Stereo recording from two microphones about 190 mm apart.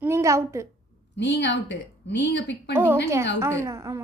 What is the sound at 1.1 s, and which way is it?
A woman's voice, 65° left (ahead or behind).